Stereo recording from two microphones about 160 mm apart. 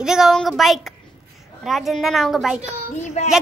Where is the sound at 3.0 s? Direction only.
45° left (ahead or behind).